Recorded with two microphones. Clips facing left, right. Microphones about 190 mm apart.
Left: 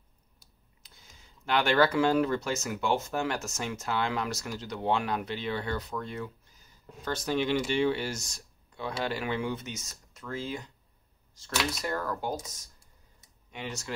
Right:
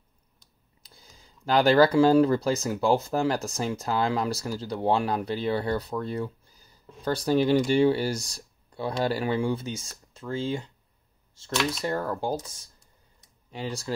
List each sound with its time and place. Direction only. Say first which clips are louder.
0.8 s speech: right 4 dB; 35° right (ahead or behind)
11.7 s speech: right 4 dB; 30° right (ahead or behind)